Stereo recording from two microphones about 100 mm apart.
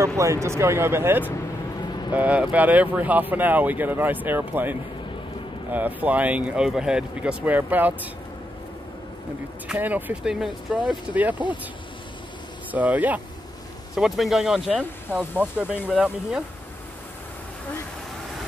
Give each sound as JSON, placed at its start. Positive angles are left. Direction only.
{"t": 0.2, "sound": "speech", "side_deg": -30}
{"t": 1.9, "sound": "vehicle", "side_deg": 45}
{"t": 2.1, "sound": "speech", "side_deg": -15}
{"t": 9.8, "sound": "speech", "side_deg": -20}
{"t": 10.2, "sound": "speech", "side_deg": -5}
{"t": 11.1, "sound": "speech", "side_deg": -15}
{"t": 12.7, "sound": "speech", "side_deg": -15}
{"t": 13.9, "sound": "speech", "side_deg": -5}